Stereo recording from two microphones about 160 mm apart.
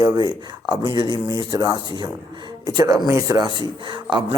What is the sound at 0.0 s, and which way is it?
A man's voice, 25° right (ahead or behind).